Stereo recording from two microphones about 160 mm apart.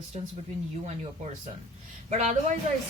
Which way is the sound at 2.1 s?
45° right (ahead or behind).